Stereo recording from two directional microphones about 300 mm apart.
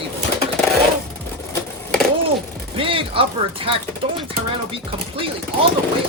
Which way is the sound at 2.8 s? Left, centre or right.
Centre.